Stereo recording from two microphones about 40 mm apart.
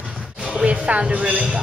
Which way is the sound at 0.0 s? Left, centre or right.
Right.